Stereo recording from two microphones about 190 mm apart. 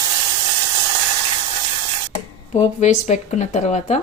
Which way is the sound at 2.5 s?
40° left (ahead or behind).